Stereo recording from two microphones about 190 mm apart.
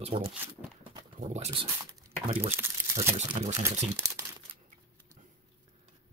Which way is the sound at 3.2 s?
35° right (ahead or behind).